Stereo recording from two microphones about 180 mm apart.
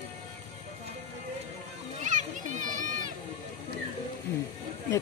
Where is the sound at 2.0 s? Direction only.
45° right (ahead or behind).